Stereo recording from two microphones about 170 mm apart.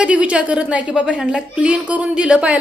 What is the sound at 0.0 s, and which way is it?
A woman's voice, 5° right (ahead or behind).